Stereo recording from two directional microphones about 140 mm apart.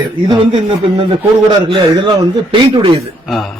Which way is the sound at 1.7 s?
35° right (ahead or behind).